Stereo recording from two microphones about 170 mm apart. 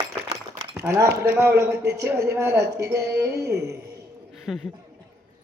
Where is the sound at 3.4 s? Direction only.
75° right (ahead or behind).